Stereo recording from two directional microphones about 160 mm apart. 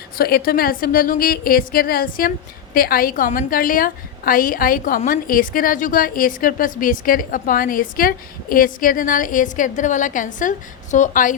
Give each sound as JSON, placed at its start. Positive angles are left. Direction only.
{"t": 0.2, "sound": "a woman's voice", "side_deg": 70}